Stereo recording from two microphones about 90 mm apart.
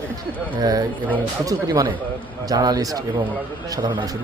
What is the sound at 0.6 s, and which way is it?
Speech, 45° right (ahead or behind).